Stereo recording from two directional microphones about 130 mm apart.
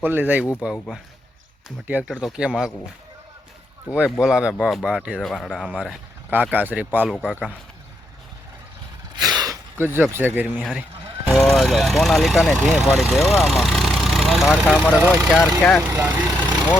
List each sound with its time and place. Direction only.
0.0 s speech: 15° right (ahead or behind)
2.0 s speech: 5° right (ahead or behind)
3.9 s speech: 5° right (ahead or behind)
9.1 s a sound: 30° right (ahead or behind)
9.7 s speech: 15° right (ahead or behind)
11.3 s speech: centre (ahead or behind)
15.4 s speech: 10° left (ahead or behind)
15.9 s speech: 15° right (ahead or behind)